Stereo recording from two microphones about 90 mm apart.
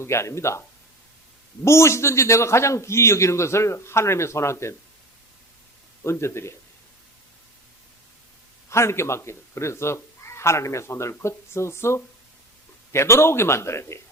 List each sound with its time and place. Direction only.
0.0 s speech: 30° left (ahead or behind)
1.6 s speech: 30° left (ahead or behind)
6.0 s speech: 30° left (ahead or behind)
8.7 s speech: 30° left (ahead or behind)